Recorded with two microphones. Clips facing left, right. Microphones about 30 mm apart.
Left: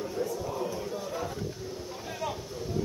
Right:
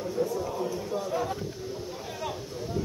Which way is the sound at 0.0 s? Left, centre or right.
Centre.